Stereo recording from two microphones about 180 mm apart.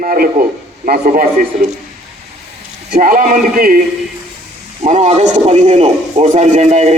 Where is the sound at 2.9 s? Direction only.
50° right (ahead or behind).